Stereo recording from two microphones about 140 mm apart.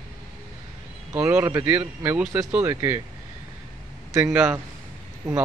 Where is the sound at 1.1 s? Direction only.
10° right (ahead or behind).